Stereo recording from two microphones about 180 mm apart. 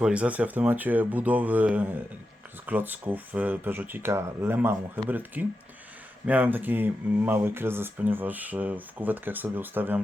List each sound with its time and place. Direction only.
0.0 s speech: 5° right (ahead or behind)